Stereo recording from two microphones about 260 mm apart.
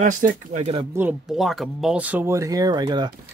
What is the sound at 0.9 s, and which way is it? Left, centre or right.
Speech, centre.